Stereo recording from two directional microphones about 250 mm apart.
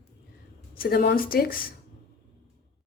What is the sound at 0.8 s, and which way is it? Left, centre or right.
Speech, left.